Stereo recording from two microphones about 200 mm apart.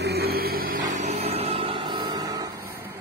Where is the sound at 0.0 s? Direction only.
50° right (ahead or behind); by 2.5 s 20° right (ahead or behind).